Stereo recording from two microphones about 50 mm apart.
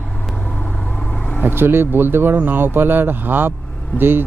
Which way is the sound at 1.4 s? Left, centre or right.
Right.